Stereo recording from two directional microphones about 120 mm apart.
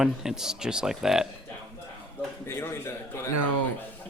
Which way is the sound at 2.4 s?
20° left (ahead or behind).